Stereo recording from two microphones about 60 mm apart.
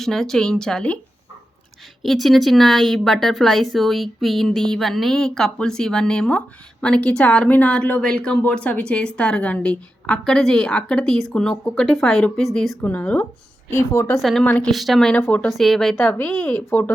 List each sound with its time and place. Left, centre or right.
0.0 s a woman's voice: centre
2.0 s a woman's voice: centre
10.1 s a woman's voice: centre
12.8 s speech: left
13.7 s a woman's voice: left
14.2 s speech: centre
16.0 s speech: left